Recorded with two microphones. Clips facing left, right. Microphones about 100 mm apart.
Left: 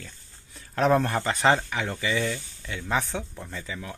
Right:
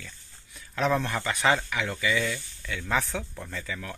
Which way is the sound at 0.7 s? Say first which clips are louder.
Left 4 dB; 40° left (ahead or behind).